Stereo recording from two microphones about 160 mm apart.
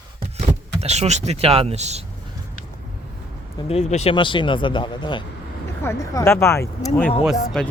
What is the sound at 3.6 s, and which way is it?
Speech, 40° left (ahead or behind).